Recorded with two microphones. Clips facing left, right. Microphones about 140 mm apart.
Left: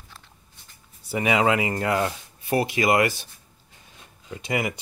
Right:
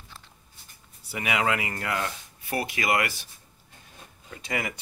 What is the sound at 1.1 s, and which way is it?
Speech, 30° left (ahead or behind).